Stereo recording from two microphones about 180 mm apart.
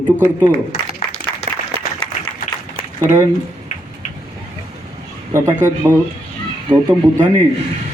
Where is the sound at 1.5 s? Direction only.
40° right (ahead or behind).